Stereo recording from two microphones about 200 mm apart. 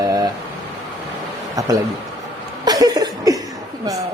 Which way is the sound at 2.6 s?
20° right (ahead or behind).